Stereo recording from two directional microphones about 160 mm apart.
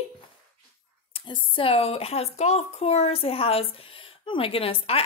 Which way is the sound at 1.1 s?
30° left (ahead or behind).